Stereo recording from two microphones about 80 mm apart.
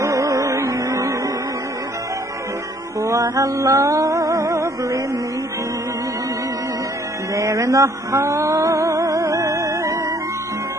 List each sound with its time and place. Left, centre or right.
0.0 s music: right
3.0 s music: right
7.3 s music: right